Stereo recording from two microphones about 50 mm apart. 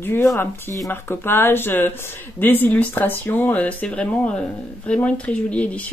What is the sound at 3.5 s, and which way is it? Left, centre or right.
Speech, left.